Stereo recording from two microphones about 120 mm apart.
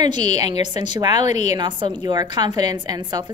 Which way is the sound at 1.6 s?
40° right (ahead or behind).